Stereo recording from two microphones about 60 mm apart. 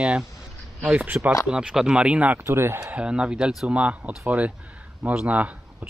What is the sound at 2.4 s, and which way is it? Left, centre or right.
Speech, right.